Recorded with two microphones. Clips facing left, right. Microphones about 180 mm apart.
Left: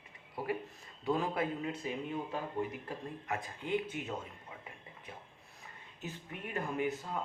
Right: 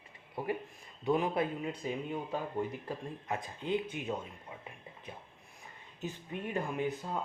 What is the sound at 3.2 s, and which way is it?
Speech, 20° right (ahead or behind).